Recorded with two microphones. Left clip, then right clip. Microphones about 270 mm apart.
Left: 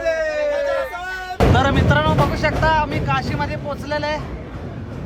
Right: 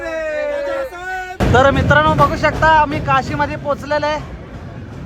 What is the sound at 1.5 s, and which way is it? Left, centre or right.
Speech, centre.